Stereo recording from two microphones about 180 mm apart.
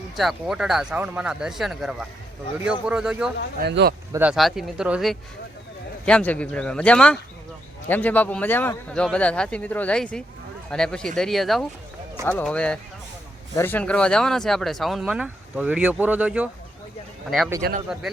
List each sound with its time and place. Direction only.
0.2 s speech: centre (ahead or behind)
3.6 s speech: 65° right (ahead or behind)
4.1 s speech: 5° right (ahead or behind)
17.6 s speech: 60° right (ahead or behind)